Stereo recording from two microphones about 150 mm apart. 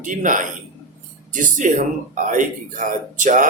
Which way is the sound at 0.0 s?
60° right (ahead or behind).